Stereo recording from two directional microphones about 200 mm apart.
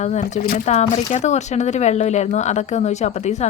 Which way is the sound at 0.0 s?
35° left (ahead or behind).